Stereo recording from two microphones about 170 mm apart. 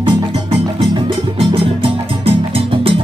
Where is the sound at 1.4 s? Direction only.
35° right (ahead or behind).